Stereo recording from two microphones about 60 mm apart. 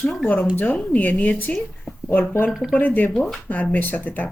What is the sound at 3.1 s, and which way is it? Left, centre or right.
Speech, centre.